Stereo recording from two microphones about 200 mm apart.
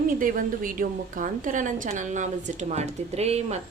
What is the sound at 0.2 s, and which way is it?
A woman's voice, 45° right (ahead or behind).